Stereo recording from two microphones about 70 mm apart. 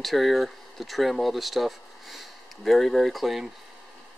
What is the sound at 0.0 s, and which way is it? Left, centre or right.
Speech, centre.